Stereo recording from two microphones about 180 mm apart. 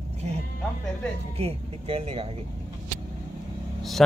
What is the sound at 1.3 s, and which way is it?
Speech, 35° right (ahead or behind).